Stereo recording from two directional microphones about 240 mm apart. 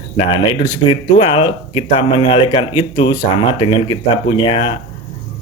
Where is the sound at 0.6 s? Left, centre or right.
Left.